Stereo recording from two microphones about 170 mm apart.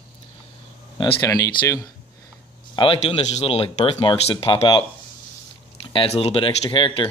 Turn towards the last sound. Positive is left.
turn(degrees=30)  # may be behind; listen again after turning